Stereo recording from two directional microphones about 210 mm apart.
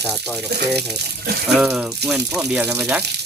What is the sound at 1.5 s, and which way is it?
Speech, 5° right (ahead or behind).